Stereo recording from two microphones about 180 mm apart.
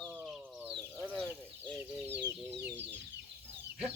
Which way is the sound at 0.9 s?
10° right (ahead or behind).